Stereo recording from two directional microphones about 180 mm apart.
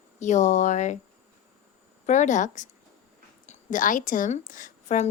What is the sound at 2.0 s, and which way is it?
A woman's voice, 45° left (ahead or behind).